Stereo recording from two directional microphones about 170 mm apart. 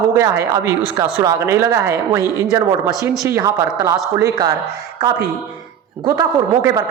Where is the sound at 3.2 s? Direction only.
15° right (ahead or behind).